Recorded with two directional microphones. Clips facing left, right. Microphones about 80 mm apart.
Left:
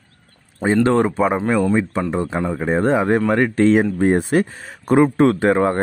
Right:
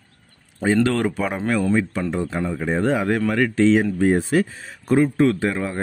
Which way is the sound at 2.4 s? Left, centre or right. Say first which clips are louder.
Left 3 dB; left.